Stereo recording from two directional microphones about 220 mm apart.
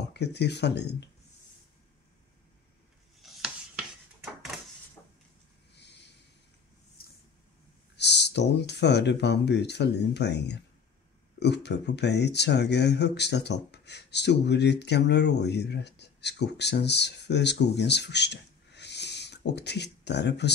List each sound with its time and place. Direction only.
0.1 s speech: 50° left (ahead or behind)
3.2 s a sound: centre (ahead or behind)
5.0 s cupboard open or close: 5° left (ahead or behind)
5.8 s snort: 50° left (ahead or behind)
7.9 s speech: 50° left (ahead or behind)